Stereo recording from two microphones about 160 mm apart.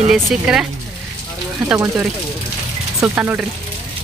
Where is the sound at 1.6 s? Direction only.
15° right (ahead or behind).